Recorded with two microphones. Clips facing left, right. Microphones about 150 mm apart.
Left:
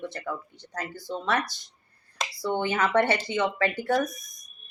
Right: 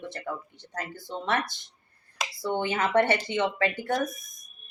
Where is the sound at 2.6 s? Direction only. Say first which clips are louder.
Even; 25° right (ahead or behind).